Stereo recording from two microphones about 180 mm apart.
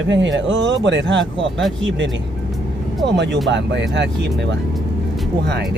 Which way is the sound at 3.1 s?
70° right (ahead or behind).